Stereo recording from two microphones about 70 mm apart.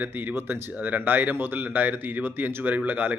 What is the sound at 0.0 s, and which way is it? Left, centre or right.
Speech, right.